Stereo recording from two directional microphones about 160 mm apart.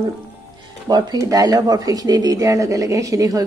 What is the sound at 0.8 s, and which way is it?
Speech, 25° right (ahead or behind).